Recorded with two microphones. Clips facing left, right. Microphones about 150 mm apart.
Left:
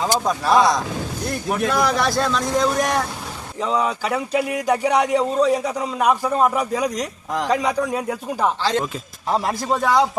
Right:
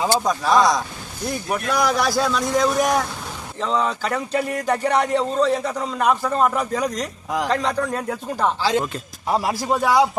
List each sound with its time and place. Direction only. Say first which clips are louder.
0.3 s speech: left 2 dB; centre (ahead or behind)
3.6 s speech: left 1 dB; 10° left (ahead or behind)
7.3 s a man's voice: even; centre (ahead or behind)
7.5 s speech: left 4 dB; 10° left (ahead or behind)
8.6 s speech: right 1 dB; 10° right (ahead or behind)